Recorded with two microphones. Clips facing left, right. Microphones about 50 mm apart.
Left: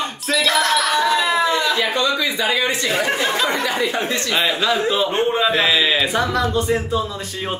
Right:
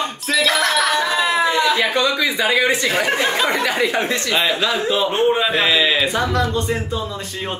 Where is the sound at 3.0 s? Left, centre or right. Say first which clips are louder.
Right 1 dB; centre.